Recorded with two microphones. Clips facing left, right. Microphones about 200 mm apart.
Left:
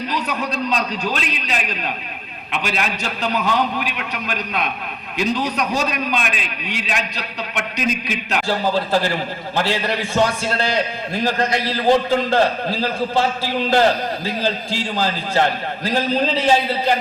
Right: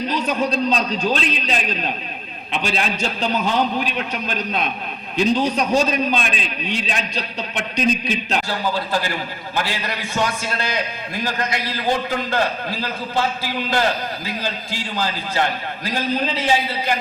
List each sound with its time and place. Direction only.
0.1 s a man's voice: 25° right (ahead or behind)
8.4 s a man's voice: 40° left (ahead or behind)